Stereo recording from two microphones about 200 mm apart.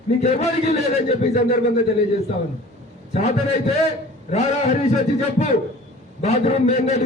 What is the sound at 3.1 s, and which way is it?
Speech, 35° left (ahead or behind).